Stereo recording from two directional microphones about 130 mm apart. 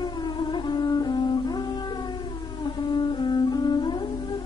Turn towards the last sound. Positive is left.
turn(degrees=35)  # may be behind; listen again after turning